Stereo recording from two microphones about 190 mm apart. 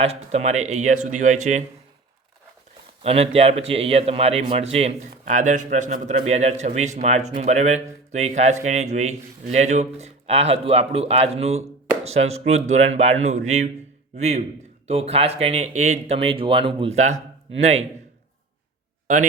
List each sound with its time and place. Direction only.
0.0 s a man's voice: 35° right (ahead or behind)
3.0 s a man's voice: 30° right (ahead or behind)